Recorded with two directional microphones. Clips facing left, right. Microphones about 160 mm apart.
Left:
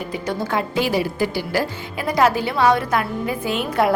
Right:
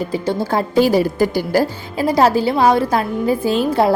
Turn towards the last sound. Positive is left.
turn(degrees=-30)  # may be behind; listen again after turning